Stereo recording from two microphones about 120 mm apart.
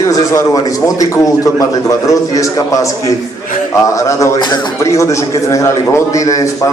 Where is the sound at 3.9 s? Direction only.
25° left (ahead or behind).